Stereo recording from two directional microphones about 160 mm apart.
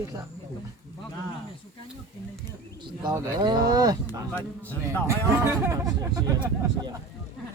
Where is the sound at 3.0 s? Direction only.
25° right (ahead or behind).